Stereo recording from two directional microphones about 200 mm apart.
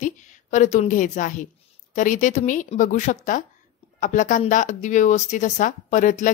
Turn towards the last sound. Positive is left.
turn(degrees=40)  # may be behind; listen again after turning